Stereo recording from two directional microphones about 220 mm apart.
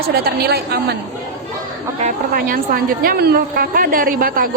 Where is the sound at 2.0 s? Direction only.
35° right (ahead or behind).